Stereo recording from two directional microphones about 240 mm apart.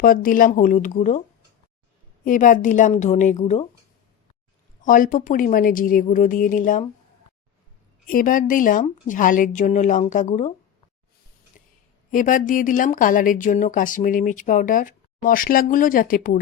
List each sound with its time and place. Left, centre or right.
0.0 s a woman's voice: left
2.2 s a woman's voice: left
4.8 s a woman's voice: left
8.0 s a woman's voice: left
11.6 s a sound: left
12.1 s a woman's voice: left